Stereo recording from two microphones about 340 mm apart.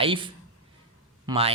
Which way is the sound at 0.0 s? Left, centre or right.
Centre.